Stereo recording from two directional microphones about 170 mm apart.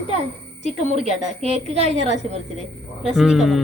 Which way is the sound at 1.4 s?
40° right (ahead or behind).